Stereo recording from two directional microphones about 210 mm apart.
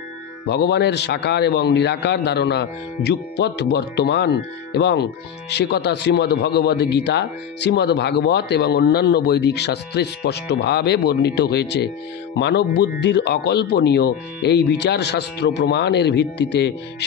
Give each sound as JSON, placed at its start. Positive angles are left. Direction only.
{"t": 0.5, "sound": "a man's voice", "side_deg": 50}